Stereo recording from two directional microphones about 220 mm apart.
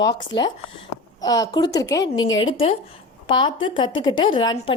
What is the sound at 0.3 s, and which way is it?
A woman's voice, 25° left (ahead or behind).